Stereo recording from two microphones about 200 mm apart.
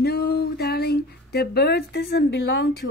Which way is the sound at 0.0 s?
55° left (ahead or behind).